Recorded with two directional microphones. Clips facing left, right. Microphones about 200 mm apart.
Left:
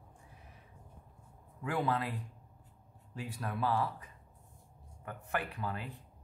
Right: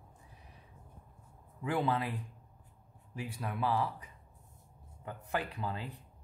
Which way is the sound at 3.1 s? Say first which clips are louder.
Even; 15° right (ahead or behind).